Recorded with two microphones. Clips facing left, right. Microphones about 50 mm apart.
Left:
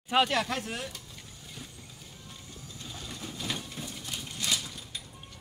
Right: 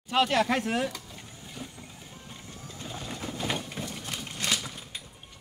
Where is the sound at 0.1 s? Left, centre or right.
Centre.